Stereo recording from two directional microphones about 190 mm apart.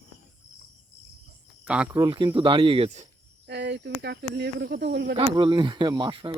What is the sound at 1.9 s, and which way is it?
Speech, 20° right (ahead or behind).